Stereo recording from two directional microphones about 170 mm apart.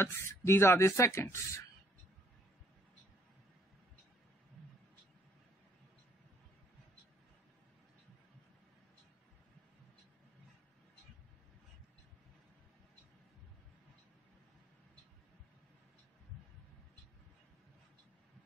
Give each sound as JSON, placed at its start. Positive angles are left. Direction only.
{"t": 0.0, "sound": "speech", "side_deg": 15}